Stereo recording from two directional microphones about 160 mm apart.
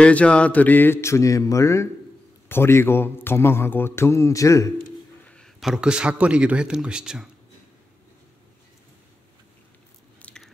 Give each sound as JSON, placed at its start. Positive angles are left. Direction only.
{"t": 0.0, "sound": "a man's voice", "side_deg": 5}
{"t": 5.2, "sound": "speech", "side_deg": 5}
{"t": 10.2, "sound": "biting", "side_deg": 5}